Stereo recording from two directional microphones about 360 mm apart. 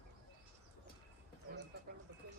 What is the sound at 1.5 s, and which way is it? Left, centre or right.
Bird, right.